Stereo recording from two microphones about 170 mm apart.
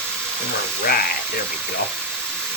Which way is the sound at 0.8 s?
60° left (ahead or behind).